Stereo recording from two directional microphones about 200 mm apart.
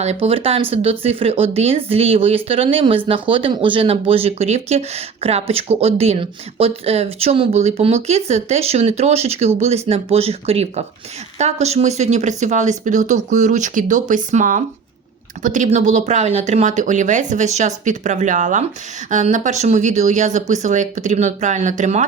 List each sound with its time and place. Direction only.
0.0 s speech: 30° right (ahead or behind)